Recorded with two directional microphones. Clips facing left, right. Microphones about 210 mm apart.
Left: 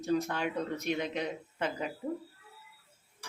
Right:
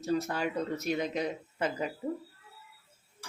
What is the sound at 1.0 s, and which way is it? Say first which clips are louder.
Speech: right 2 dB; 40° right (ahead or behind).